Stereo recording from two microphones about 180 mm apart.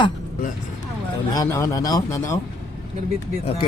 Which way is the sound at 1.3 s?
20° left (ahead or behind).